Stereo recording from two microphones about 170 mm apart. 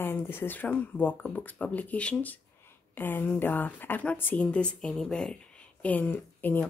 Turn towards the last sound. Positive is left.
turn(degrees=10)  # may be behind; listen again after turning